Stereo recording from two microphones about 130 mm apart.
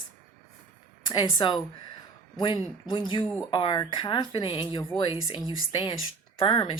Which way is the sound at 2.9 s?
40° left (ahead or behind).